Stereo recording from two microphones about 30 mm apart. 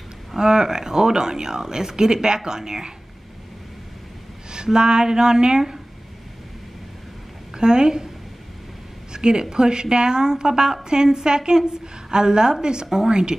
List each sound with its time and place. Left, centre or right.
0.4 s a woman's voice: right
4.6 s a woman's voice: right
7.5 s a woman's voice: right
9.1 s a woman's voice: right